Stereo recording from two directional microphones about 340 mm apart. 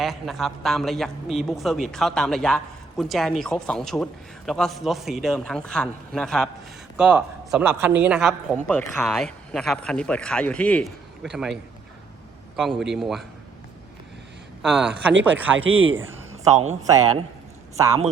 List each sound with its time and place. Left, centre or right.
0.0 s a man's voice: centre
12.5 s a man's voice: centre
14.6 s a man's voice: centre
15.5 s speech: right
15.9 s a man's voice: centre
16.3 s a sound: centre
16.8 s a man's voice: centre